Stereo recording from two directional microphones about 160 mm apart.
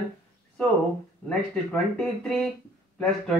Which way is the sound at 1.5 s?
5° left (ahead or behind).